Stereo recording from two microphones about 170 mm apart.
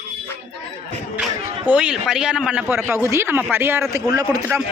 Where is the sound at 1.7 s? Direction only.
5° right (ahead or behind); by 4.6 s 20° right (ahead or behind).